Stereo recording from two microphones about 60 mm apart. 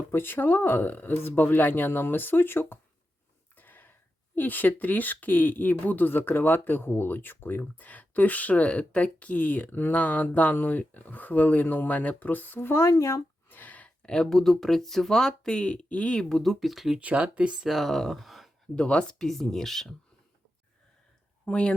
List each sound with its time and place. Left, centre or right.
0.1 s speech: left
3.5 s a sound: left
4.4 s speech: left
7.6 s speech: left
12.9 s speech: left
13.5 s speech: left
16.3 s speech: centre
17.0 s speech: right
17.6 s speech: centre
18.8 s speech: centre
19.2 s speech: centre
21.4 s speech: centre